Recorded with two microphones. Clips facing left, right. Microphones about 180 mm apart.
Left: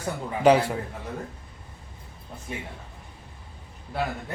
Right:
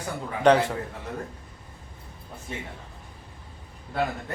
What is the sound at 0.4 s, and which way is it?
Speech, 10° left (ahead or behind).